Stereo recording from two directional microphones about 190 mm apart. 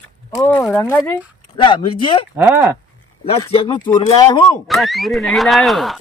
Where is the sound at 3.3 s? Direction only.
30° left (ahead or behind).